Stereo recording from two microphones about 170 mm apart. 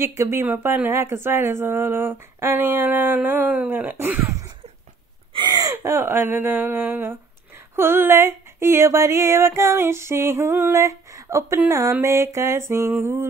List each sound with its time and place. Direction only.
0.2 s speech: 15° right (ahead or behind)
5.3 s speech: 25° right (ahead or behind)